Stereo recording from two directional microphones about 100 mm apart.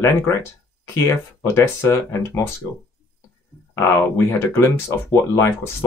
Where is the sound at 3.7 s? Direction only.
30° left (ahead or behind).